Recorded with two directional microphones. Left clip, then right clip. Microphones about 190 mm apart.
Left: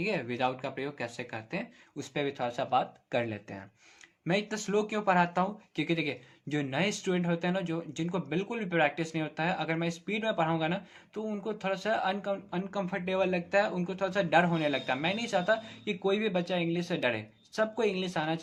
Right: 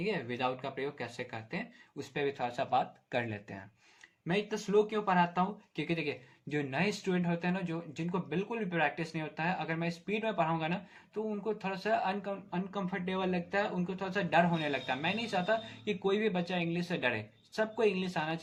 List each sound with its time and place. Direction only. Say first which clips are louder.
0.0 s speech: left 3 dB; 35° left (ahead or behind); by 3.6 s 20° left (ahead or behind)
4.3 s speech: left 2 dB; 35° left (ahead or behind)